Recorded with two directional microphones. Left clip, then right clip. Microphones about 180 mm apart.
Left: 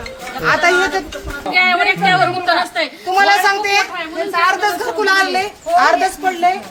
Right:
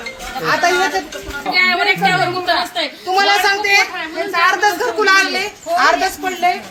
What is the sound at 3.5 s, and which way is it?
A woman's voice, 80° left.